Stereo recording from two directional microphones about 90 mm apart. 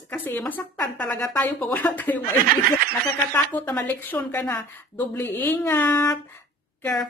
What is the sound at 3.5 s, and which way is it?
A woman's voice, 15° left (ahead or behind).